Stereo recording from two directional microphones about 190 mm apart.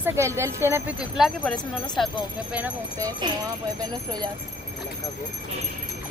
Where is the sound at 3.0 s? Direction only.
20° right (ahead or behind).